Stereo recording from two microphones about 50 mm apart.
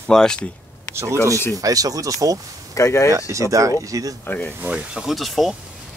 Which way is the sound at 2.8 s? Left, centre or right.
Left.